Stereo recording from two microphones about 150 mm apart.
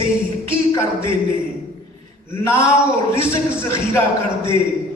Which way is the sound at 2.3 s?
15° left (ahead or behind).